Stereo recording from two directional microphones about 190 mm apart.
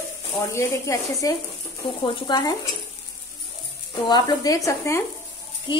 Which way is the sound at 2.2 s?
25° left (ahead or behind).